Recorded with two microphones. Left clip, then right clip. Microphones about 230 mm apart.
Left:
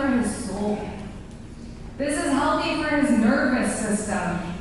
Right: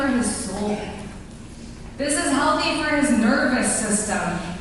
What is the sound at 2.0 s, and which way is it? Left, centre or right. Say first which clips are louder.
A woman's voice: right 2 dB; centre.